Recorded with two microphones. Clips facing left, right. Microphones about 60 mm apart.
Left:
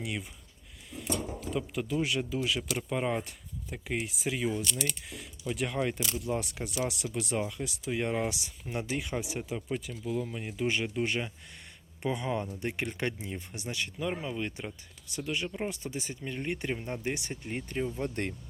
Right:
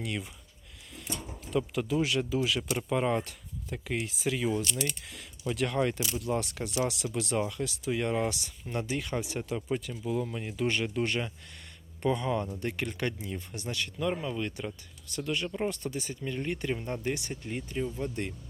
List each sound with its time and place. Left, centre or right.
1.5 s speech: centre
9.4 s speech: centre
15.9 s speech: left
17.5 s speech: left